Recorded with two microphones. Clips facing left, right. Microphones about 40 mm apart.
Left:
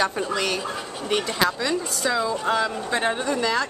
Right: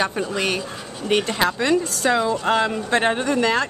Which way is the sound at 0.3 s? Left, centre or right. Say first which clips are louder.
Right 1 dB; right.